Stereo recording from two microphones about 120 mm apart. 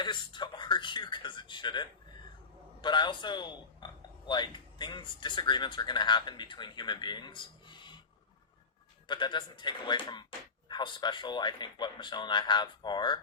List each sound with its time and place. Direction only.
0.0 s a man's voice: 40° left (ahead or behind)
9.0 s a man's voice: 40° left (ahead or behind)